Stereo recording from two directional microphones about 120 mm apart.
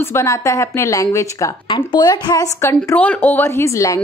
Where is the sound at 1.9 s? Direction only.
35° left (ahead or behind).